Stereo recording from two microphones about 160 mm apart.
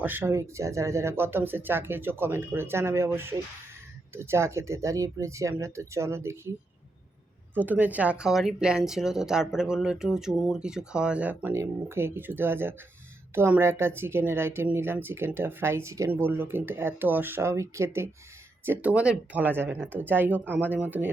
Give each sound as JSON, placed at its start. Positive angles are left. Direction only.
{"t": 0.0, "sound": "speech", "side_deg": -10}
{"t": 7.5, "sound": "speech", "side_deg": -10}